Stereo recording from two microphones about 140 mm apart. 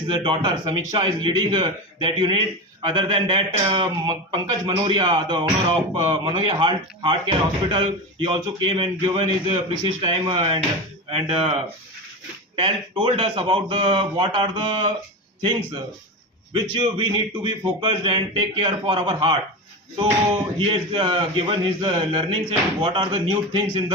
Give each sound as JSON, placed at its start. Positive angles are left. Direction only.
{"t": 0.1, "sound": "speech", "side_deg": -35}
{"t": 16.5, "sound": "speech", "side_deg": -35}
{"t": 20.6, "sound": "speech", "side_deg": -40}